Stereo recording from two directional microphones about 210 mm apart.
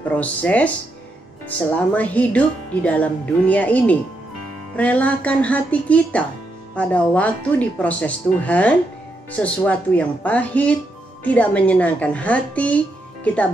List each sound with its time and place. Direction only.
0.1 s speech: 5° left (ahead or behind)
2.0 s speech: 5° left (ahead or behind)